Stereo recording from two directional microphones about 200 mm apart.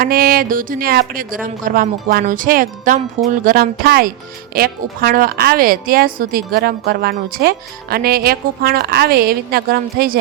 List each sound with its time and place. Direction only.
0.0 s a woman's voice: 45° right (ahead or behind)